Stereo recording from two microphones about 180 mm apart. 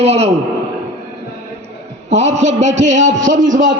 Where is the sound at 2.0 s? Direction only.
35° right (ahead or behind).